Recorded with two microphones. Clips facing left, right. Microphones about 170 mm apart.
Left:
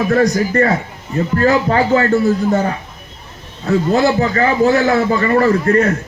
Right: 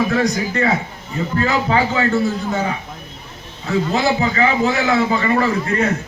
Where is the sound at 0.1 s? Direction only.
45° left (ahead or behind).